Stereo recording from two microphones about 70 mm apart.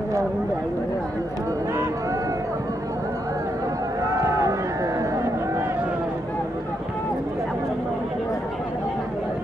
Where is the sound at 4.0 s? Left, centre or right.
Right.